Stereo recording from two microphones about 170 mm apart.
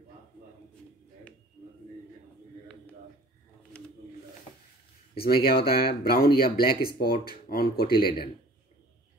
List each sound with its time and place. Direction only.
5.1 s speech: 65° left (ahead or behind)